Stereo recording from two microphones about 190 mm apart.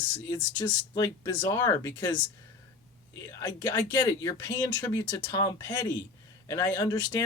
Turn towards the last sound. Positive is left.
turn(degrees=20)  # may be behind; listen again after turning